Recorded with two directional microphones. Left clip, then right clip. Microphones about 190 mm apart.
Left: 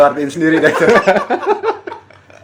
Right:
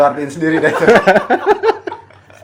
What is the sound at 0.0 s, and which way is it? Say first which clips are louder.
Speech: left 2 dB; 15° left (ahead or behind).